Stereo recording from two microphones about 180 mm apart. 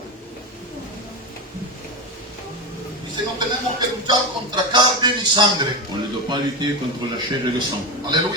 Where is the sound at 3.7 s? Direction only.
25° right (ahead or behind).